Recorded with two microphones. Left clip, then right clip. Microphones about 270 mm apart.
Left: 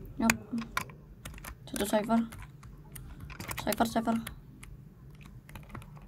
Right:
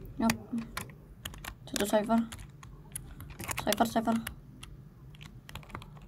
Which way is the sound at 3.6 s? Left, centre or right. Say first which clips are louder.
Right 1 dB; centre.